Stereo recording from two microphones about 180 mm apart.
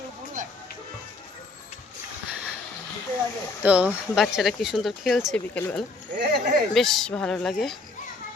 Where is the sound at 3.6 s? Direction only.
5° right (ahead or behind).